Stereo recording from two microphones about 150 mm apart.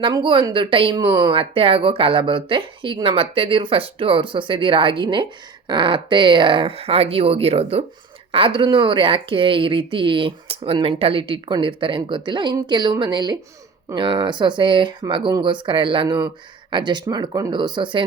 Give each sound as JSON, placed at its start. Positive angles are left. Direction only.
{"t": 0.0, "sound": "speech", "side_deg": -35}